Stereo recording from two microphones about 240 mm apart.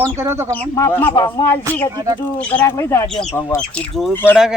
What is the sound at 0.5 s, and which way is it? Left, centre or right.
Speech, centre.